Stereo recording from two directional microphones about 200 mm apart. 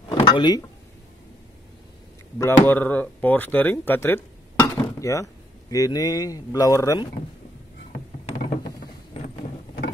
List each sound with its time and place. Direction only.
0.2 s a sound: 20° left (ahead or behind)
2.3 s speech: 10° left (ahead or behind)
9.1 s vehicle: 30° left (ahead or behind)